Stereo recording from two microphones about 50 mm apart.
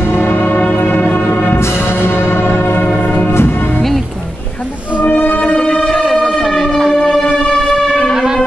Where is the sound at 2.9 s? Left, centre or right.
Left.